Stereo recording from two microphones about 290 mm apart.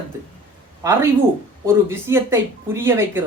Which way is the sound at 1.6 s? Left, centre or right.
Centre.